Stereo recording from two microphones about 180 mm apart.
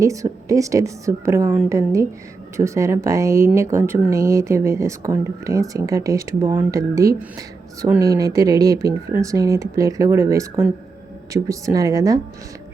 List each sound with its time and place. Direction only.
0.0 s a woman's voice: 15° right (ahead or behind)